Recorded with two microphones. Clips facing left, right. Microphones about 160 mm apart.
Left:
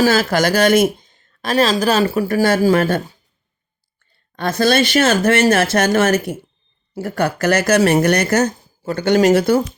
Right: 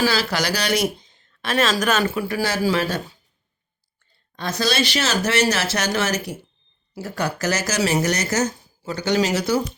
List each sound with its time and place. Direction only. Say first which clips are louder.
0.0 s a woman's voice: left 7 dB; 50° left (ahead or behind)
4.4 s speech: left 7 dB; 55° left (ahead or behind)